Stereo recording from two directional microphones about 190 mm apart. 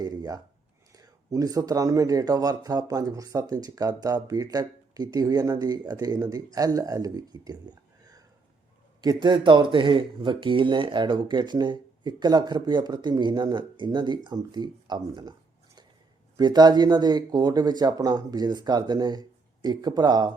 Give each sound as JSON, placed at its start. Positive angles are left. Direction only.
{"t": 0.0, "sound": "a sound", "side_deg": -20}
{"t": 0.9, "sound": "speech", "side_deg": -20}
{"t": 9.0, "sound": "speech", "side_deg": -20}